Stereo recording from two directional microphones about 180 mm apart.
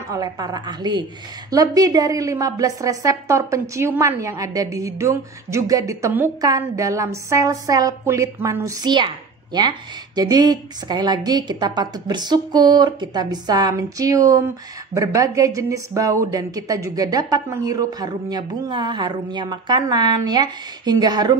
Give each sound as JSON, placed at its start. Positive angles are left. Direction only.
{"t": 0.1, "sound": "a woman's voice", "side_deg": -20}